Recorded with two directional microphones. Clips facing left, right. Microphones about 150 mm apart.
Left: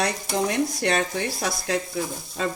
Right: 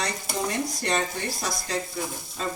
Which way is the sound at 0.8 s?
70° left (ahead or behind).